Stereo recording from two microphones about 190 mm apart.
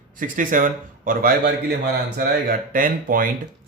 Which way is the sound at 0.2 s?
45° right (ahead or behind).